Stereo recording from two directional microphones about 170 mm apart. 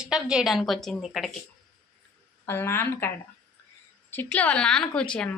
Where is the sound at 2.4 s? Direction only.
15° left (ahead or behind).